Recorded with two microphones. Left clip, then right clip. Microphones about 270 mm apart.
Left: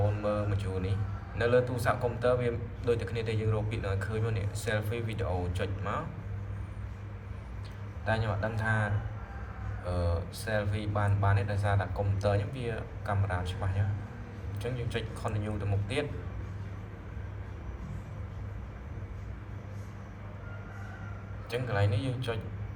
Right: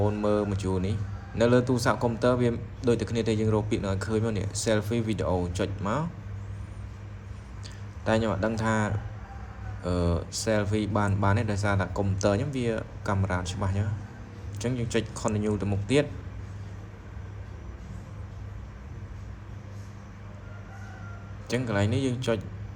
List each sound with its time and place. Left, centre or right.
0.2 s a man's voice: right
8.0 s a man's voice: right
9.8 s a man's voice: right
21.5 s a man's voice: right